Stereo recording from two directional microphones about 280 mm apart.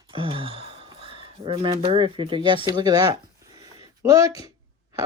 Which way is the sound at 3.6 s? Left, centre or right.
Centre.